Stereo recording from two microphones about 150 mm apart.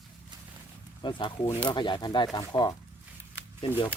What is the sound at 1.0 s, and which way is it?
Speech, 30° left (ahead or behind).